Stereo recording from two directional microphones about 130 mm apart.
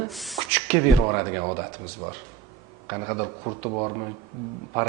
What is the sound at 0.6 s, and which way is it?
Speech, 20° right (ahead or behind).